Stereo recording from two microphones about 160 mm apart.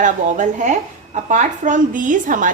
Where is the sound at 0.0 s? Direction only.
50° right (ahead or behind).